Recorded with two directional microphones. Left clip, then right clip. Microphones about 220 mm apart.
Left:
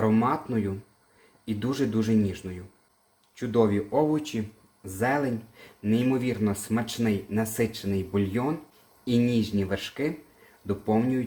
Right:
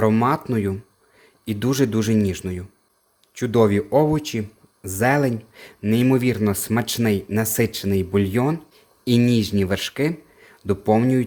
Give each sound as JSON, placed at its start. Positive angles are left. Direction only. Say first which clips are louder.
{"t": 0.0, "sound": "speech", "louder": "right 6 dB", "side_deg": -50}